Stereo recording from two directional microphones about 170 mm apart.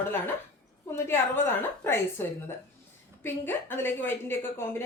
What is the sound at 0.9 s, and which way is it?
Speech, 15° left (ahead or behind).